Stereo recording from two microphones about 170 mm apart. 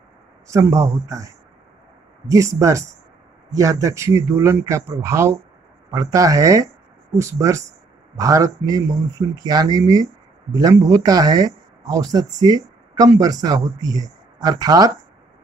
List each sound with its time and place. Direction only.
0.5 s speech: 15° right (ahead or behind)